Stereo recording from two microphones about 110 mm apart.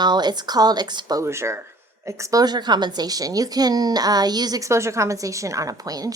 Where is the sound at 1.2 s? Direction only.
25° right (ahead or behind).